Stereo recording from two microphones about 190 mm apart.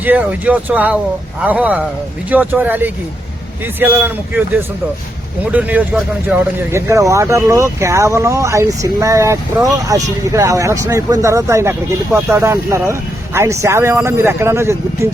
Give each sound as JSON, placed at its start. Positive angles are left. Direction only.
{"t": 0.0, "sound": "speech", "side_deg": -10}
{"t": 5.5, "sound": "speech", "side_deg": -10}